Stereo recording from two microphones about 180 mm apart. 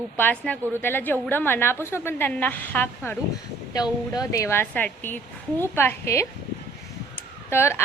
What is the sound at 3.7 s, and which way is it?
A woman's voice, 20° left (ahead or behind).